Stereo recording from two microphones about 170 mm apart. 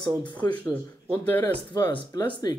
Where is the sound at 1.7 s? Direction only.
25° left (ahead or behind).